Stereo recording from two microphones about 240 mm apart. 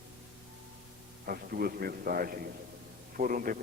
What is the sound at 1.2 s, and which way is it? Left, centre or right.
A man's voice, right.